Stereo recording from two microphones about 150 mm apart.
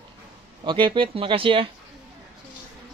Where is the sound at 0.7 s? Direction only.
30° right (ahead or behind).